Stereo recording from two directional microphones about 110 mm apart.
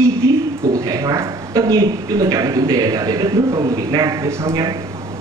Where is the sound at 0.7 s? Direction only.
30° right (ahead or behind).